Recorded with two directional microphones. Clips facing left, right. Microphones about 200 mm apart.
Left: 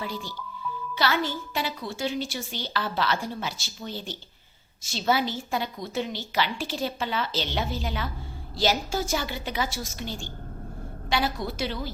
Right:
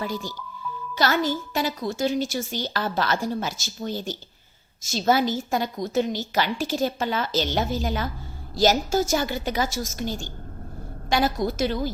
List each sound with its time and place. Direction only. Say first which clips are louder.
0.0 s a woman's voice: right 4 dB; 45° right (ahead or behind)